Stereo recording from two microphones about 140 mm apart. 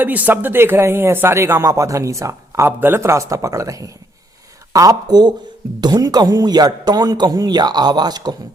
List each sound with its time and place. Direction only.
0.0 s speech: 10° right (ahead or behind); by 8.4 s 30° right (ahead or behind)